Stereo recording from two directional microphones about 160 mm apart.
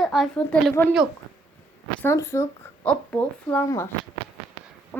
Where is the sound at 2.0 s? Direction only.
15° left (ahead or behind).